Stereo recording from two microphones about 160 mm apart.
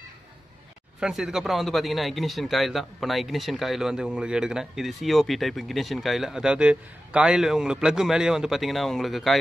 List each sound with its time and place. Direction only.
1.0 s a man's voice: 5° right (ahead or behind)